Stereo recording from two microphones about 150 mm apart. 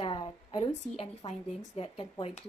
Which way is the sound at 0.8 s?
40° left (ahead or behind).